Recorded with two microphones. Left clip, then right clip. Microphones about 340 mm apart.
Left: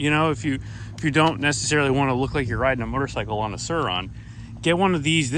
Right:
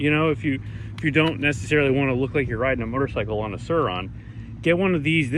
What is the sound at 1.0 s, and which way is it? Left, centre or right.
Speech, left.